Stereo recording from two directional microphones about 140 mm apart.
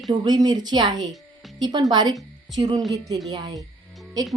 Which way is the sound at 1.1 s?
Centre (ahead or behind).